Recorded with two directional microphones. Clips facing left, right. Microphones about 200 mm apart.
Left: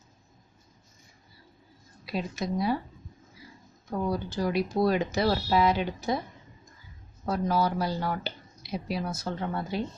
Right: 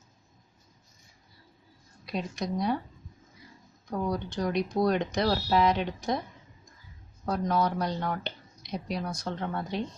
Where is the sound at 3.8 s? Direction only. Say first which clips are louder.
Left 1 dB; 5° left (ahead or behind).